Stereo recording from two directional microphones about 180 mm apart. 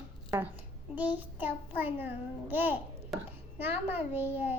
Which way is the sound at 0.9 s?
10° right (ahead or behind).